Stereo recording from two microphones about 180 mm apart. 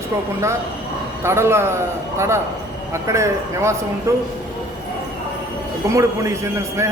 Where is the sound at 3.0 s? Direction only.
15° right (ahead or behind).